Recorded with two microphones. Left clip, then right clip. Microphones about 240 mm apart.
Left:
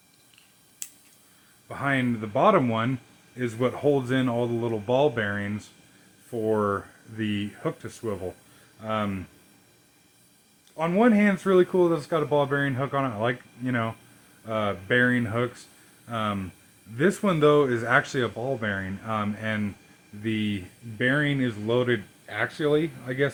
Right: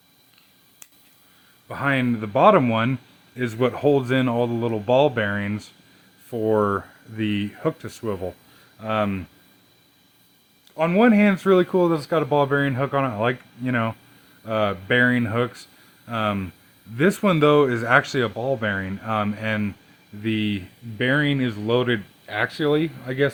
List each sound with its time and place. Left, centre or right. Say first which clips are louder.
0.8 s a sound: left 8 dB; centre
1.6 s speech: right 4 dB; right
10.8 s speech: right 4 dB; right